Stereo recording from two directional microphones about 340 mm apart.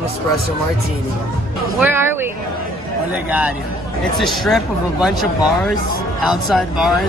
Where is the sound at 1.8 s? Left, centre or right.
Centre.